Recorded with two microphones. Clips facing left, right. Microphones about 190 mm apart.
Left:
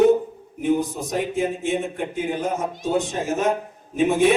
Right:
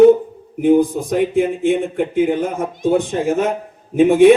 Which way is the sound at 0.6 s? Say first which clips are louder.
Right 8 dB; 55° right (ahead or behind).